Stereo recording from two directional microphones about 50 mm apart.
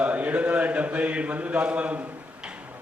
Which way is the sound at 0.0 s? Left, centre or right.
Right.